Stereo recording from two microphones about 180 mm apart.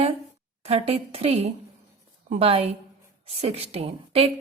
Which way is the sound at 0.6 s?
35° right (ahead or behind).